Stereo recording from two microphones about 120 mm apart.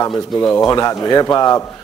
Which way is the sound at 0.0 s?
35° left (ahead or behind).